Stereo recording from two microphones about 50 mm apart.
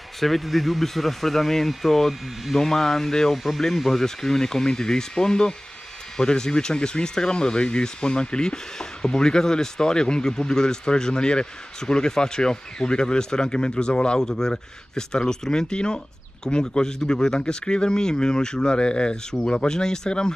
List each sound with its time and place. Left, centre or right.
0.2 s speech: centre